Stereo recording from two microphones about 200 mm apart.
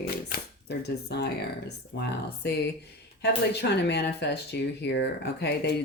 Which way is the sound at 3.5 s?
55° left (ahead or behind).